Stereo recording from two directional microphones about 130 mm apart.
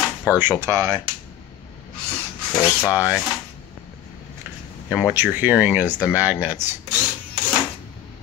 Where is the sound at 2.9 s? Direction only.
10° right (ahead or behind).